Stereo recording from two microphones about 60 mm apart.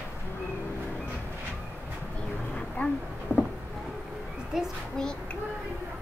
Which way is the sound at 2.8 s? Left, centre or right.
Left.